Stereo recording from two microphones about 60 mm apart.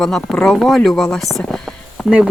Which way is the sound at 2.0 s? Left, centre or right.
Centre.